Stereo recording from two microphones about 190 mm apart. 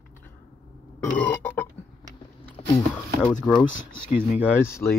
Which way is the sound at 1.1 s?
10° left (ahead or behind).